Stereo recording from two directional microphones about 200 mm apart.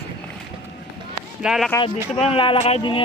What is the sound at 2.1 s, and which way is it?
Speech, 30° left (ahead or behind).